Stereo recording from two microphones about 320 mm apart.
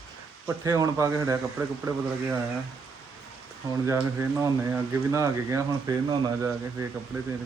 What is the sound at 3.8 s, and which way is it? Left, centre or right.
Speech, centre.